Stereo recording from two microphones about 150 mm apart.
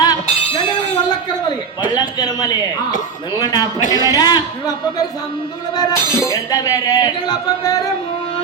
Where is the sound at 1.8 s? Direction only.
25° left (ahead or behind).